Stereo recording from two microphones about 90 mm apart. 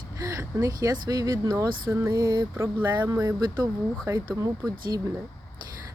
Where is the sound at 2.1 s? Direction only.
45° right (ahead or behind).